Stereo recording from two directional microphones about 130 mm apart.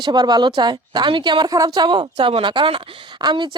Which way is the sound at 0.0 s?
35° right (ahead or behind).